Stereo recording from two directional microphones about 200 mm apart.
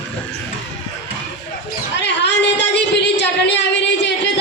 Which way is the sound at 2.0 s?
60° left (ahead or behind).